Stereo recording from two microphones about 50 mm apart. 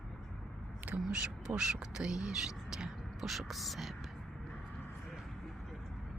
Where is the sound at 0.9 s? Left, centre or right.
Right.